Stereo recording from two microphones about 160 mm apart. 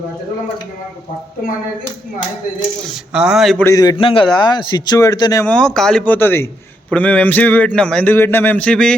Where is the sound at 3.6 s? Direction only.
20° left (ahead or behind).